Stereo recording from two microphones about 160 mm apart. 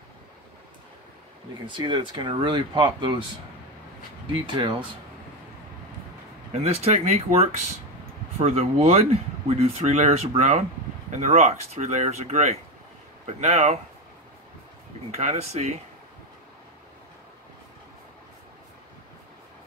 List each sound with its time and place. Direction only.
1.8 s speech: 30° right (ahead or behind)
4.3 s speech: 30° right (ahead or behind)
6.5 s speech: 40° right (ahead or behind)
15.0 s speech: 45° right (ahead or behind)